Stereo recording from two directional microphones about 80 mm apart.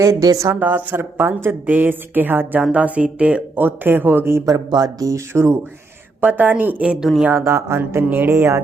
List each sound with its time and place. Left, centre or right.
0.0 s speech: right
0.6 s speech: right
3.6 s speech: right
4.4 s speech: right
5.3 s speech: right
6.2 s speech: right
7.3 s speech: right
7.8 s speech: right